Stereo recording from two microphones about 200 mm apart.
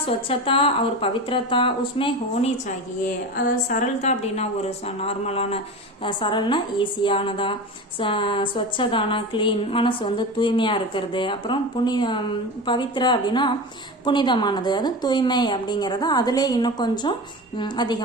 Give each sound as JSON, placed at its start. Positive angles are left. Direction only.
{"t": 0.0, "sound": "a woman's voice", "side_deg": 25}
{"t": 3.3, "sound": "a woman's voice", "side_deg": 40}